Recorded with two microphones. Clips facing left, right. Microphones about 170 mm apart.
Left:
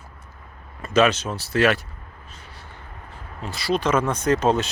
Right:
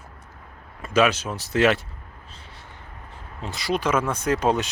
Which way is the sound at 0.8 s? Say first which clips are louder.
Left 2 dB; 10° right (ahead or behind).